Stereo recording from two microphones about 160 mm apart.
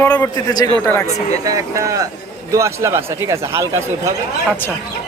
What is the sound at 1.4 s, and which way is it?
Speech, 20° right (ahead or behind).